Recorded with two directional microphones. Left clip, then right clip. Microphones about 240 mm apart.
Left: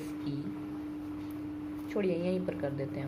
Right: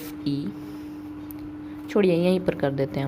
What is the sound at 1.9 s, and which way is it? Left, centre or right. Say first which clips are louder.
A woman's voice: right 11 dB; right.